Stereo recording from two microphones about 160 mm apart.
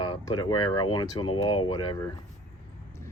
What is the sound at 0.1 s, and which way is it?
Speech, 25° left (ahead or behind).